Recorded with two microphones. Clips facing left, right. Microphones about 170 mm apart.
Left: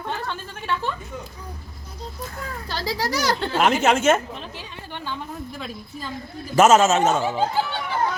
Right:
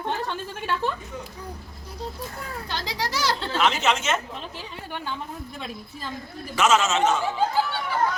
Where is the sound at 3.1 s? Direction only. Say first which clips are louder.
Left 3 dB; 45° left (ahead or behind).